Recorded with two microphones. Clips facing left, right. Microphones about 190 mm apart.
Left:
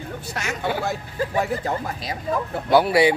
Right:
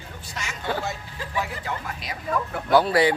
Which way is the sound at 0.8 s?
50° left (ahead or behind).